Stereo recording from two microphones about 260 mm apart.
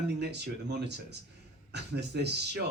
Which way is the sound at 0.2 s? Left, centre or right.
Right.